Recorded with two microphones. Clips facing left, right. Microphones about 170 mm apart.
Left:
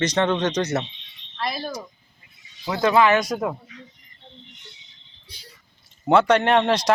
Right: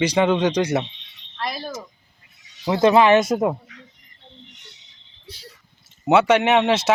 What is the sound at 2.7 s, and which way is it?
Speech, 25° right (ahead or behind).